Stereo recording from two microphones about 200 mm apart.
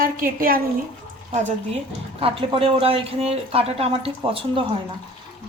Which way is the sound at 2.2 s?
25° right (ahead or behind).